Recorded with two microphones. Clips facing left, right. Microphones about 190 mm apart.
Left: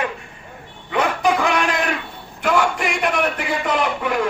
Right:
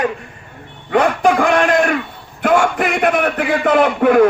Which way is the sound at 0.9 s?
50° right (ahead or behind).